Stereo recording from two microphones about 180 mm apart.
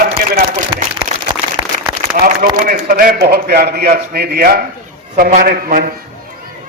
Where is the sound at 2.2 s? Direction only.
50° right (ahead or behind).